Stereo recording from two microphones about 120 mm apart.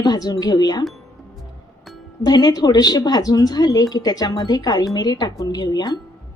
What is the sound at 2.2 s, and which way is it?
Speech, 35° left (ahead or behind).